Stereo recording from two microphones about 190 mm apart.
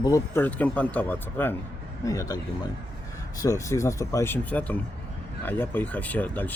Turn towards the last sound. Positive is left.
turn(degrees=10)  # may be behind; listen again after turning